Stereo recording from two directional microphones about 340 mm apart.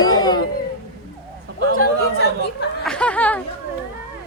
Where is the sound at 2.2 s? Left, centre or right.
Left.